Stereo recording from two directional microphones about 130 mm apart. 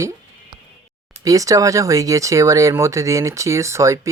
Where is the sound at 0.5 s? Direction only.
35° right (ahead or behind).